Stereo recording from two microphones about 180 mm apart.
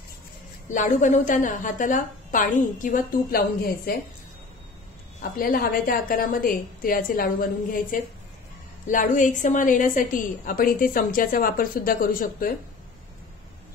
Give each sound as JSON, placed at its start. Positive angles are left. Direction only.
{"t": 0.7, "sound": "a woman's voice", "side_deg": 45}
{"t": 5.4, "sound": "a woman's voice", "side_deg": 55}